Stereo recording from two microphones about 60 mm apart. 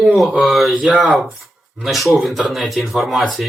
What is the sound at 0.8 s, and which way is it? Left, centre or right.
Speech, centre.